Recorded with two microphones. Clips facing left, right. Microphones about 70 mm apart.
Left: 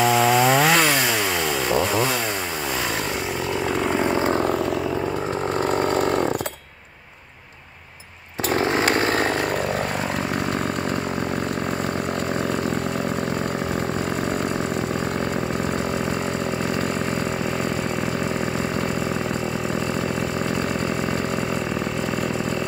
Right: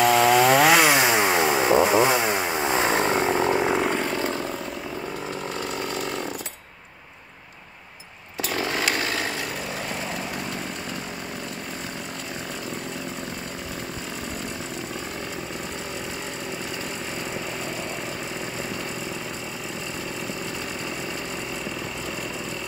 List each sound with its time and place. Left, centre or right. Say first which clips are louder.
0.0 s chainsaw: even; centre
0.8 s chainsaw: right 2 dB; centre
4.0 s vehicle: left 5 dB; left
5.7 s mechanisms: left 11 dB; left
8.5 s chainsaw: left 6 dB; left